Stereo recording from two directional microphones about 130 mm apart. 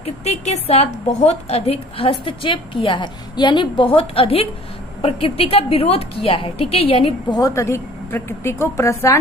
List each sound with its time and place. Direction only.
0.0 s a woman's voice: 55° left (ahead or behind)
7.3 s a woman's voice: 30° left (ahead or behind)